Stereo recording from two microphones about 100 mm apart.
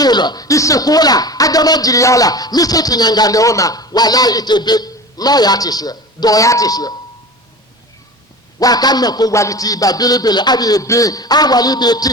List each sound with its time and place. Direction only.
0.0 s speech: 45° left (ahead or behind)
8.5 s speech: 40° left (ahead or behind)